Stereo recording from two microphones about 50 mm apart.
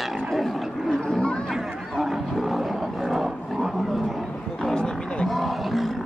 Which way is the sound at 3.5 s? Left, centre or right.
Centre.